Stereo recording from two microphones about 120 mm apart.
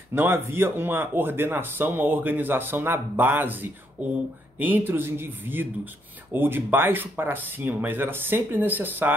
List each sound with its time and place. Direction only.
0.1 s speech: 20° right (ahead or behind)